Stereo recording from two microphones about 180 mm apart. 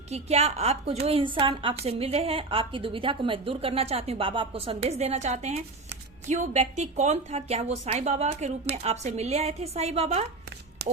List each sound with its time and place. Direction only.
0.1 s a woman's voice: 35° right (ahead or behind)